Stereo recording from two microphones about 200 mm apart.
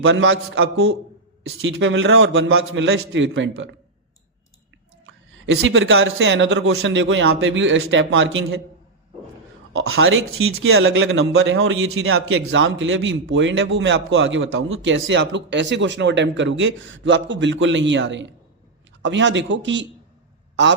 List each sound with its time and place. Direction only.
0.0 s a man's voice: 75° right (ahead or behind)
5.0 s a man's voice: 75° right (ahead or behind)
9.7 s a man's voice: 90° right; by 20.7 s 65° right (ahead or behind)